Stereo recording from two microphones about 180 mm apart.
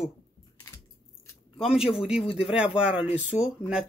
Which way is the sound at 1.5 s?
30° left (ahead or behind).